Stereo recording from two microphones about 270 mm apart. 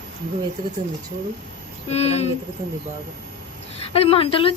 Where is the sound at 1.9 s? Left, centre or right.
Left.